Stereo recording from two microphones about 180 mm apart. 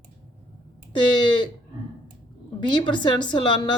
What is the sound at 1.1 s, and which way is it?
Speech, 25° left (ahead or behind).